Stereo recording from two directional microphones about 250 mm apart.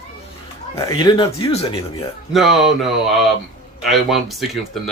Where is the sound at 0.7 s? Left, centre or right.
Centre.